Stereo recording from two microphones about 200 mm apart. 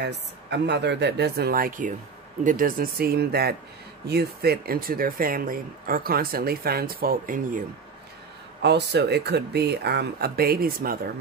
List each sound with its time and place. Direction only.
0.0 s speech: 55° right (ahead or behind); by 7.6 s 40° right (ahead or behind)
8.6 s speech: 55° right (ahead or behind)